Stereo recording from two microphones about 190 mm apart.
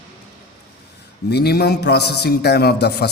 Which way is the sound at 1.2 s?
60° left (ahead or behind).